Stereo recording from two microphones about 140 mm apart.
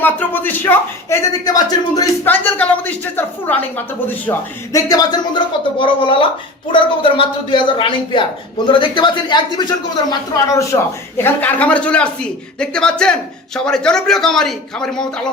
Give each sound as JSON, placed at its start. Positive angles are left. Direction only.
{"t": 0.0, "sound": "speech", "side_deg": 15}
{"t": 2.2, "sound": "speech", "side_deg": 15}
{"t": 4.7, "sound": "speech", "side_deg": 25}
{"t": 11.2, "sound": "a man's voice", "side_deg": 10}